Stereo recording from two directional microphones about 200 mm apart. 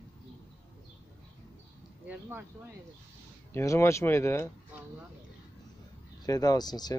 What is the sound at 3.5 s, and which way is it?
Speech, 15° left (ahead or behind).